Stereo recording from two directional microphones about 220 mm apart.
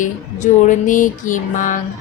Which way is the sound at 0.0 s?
35° left (ahead or behind).